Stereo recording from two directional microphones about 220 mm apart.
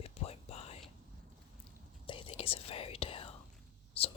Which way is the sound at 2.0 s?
25° left (ahead or behind).